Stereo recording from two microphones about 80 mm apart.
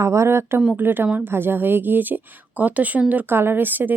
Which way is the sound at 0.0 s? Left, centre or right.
Right.